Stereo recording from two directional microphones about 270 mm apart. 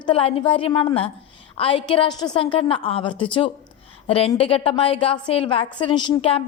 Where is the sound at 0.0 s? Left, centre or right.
Centre.